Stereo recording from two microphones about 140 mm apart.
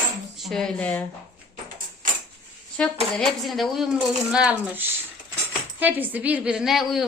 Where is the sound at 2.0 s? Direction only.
75° right (ahead or behind).